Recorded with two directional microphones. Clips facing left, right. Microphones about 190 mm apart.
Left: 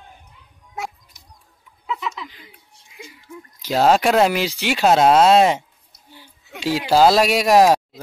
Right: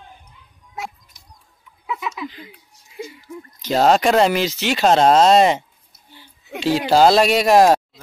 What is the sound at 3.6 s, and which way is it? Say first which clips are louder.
Speech: right 1 dB; 5° left (ahead or behind).